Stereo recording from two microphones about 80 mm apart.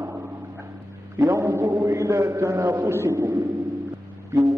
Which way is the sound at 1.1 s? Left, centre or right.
Right.